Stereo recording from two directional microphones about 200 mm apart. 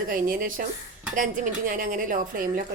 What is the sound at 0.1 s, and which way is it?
A woman's voice, 45° right (ahead or behind).